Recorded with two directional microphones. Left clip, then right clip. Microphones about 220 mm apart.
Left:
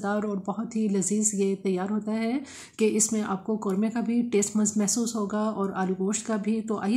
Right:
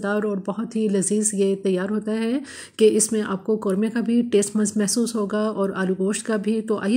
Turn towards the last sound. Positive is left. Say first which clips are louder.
# right 6 dB
turn(degrees=-10)  # may be behind; listen again after turning